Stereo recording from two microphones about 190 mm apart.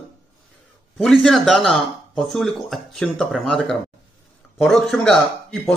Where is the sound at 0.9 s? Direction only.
Centre (ahead or behind).